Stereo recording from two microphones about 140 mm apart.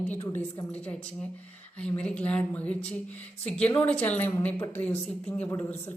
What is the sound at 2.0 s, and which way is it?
A woman's voice, 10° left (ahead or behind).